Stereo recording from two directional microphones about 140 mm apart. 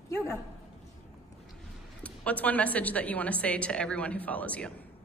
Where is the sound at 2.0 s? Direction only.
10° left (ahead or behind).